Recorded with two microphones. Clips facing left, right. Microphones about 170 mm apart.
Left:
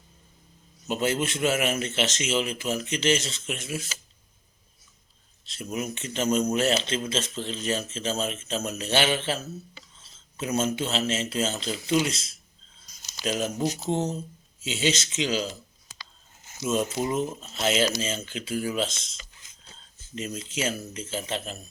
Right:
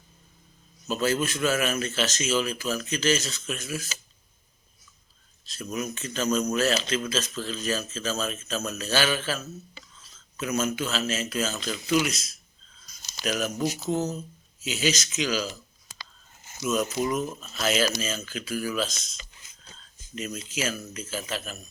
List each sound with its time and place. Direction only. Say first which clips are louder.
0.9 s speech: even; 20° left (ahead or behind)
5.5 s speech: even; 25° left (ahead or behind)
16.6 s speech: even; 25° left (ahead or behind)
20.1 s speech: left 1 dB; 25° left (ahead or behind)